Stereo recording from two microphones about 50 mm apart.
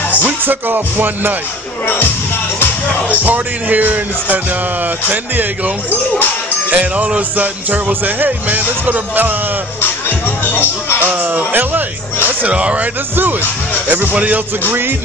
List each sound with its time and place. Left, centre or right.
0.5 s speech: right
3.3 s speech: right
5.9 s speech: left
6.7 s speech: right
9.8 s music: left
11.0 s music: right
12.5 s speech: right
13.1 s speech: right
14.1 s speech: right
14.7 s music: right